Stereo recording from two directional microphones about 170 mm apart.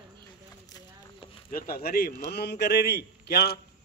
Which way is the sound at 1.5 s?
60° left (ahead or behind).